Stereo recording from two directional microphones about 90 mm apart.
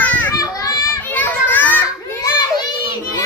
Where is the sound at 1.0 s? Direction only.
20° left (ahead or behind).